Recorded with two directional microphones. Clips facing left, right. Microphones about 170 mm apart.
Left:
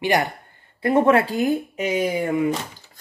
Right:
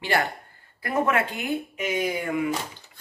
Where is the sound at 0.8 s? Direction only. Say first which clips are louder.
Left 7 dB; 30° left (ahead or behind).